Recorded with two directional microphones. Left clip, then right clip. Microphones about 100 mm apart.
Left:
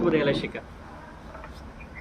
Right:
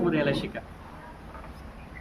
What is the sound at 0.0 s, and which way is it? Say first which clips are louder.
Speech: left 3 dB; 25° right (ahead or behind).